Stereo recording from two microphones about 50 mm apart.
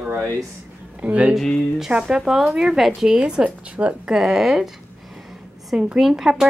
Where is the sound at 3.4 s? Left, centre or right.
Right.